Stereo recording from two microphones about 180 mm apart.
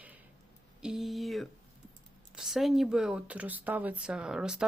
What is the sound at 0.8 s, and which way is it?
Speech, centre (ahead or behind).